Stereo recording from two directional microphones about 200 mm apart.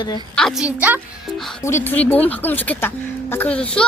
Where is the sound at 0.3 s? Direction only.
Centre (ahead or behind).